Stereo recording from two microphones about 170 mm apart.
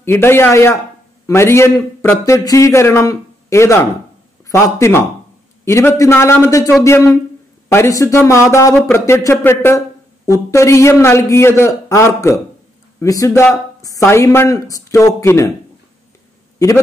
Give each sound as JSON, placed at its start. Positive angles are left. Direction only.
{"t": 0.0, "sound": "a man's voice", "side_deg": 15}
{"t": 13.3, "sound": "speech", "side_deg": 10}
{"t": 16.5, "sound": "a man's voice", "side_deg": 20}